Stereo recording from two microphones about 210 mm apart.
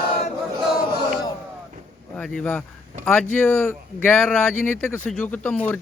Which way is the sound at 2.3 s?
5° left (ahead or behind).